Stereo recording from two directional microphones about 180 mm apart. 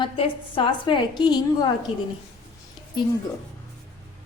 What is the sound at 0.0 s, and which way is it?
A woman's voice, 30° left (ahead or behind).